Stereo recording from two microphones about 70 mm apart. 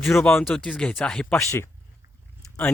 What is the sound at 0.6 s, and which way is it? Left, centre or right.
Speech, centre.